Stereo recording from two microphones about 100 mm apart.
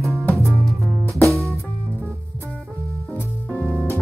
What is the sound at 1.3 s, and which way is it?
Music, centre (ahead or behind).